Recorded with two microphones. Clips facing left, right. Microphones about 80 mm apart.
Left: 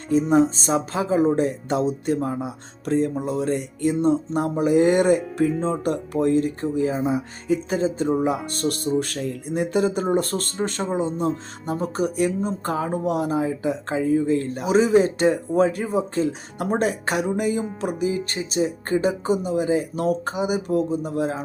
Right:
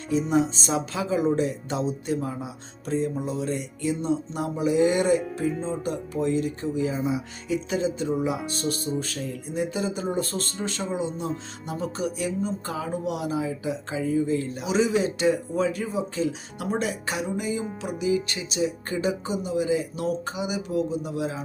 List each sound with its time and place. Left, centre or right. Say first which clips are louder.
0.1 s speech: left 5 dB; left
5.3 s speech: left 6 dB; left
12.1 s speech: left 5 dB; left